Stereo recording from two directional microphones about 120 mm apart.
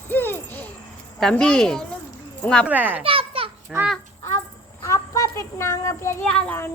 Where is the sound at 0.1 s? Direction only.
15° left (ahead or behind).